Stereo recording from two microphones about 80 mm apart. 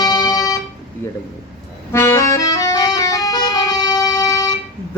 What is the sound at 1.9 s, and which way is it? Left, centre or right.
Music, left.